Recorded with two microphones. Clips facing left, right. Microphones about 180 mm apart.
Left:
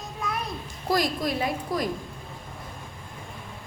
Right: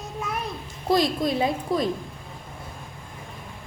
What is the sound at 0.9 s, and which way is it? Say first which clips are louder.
Speech: right 4 dB; 25° right (ahead or behind).